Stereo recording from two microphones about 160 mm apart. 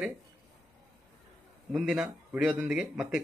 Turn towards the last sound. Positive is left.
turn(degrees=-5)  # may be behind; listen again after turning